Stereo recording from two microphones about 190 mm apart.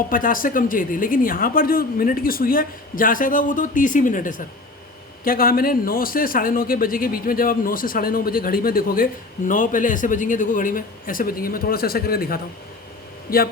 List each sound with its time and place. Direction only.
0.1 s speech: 45° left (ahead or behind)